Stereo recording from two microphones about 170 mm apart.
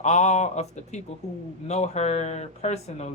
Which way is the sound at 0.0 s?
45° left (ahead or behind).